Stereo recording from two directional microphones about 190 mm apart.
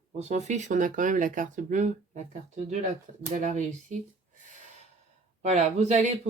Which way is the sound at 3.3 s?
40° right (ahead or behind).